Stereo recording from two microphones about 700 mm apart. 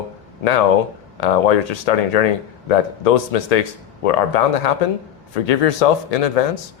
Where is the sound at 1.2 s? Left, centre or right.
Left.